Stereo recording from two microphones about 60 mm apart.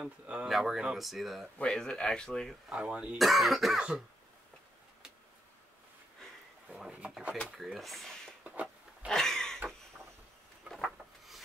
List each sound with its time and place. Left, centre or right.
0.0 s speech: right
0.5 s speech: centre
1.6 s speech: centre
2.7 s speech: centre
3.2 s speech: centre
7.4 s speech: centre
8.5 s a sound: centre
9.1 s a sound: centre
10.7 s rub: centre